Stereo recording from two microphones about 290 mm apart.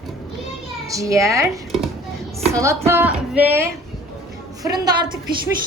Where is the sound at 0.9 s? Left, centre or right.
Centre.